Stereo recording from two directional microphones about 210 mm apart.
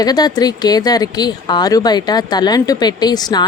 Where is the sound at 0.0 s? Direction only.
20° left (ahead or behind).